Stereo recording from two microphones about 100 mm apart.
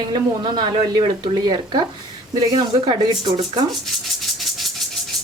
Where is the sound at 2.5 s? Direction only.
50° right (ahead or behind).